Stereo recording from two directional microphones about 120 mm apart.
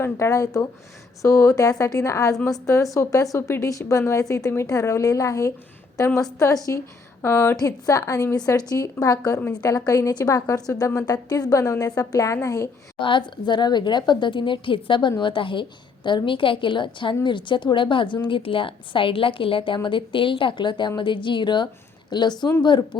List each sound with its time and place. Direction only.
0.0 s a woman's voice: 25° left (ahead or behind)
13.0 s a woman's voice: 45° left (ahead or behind)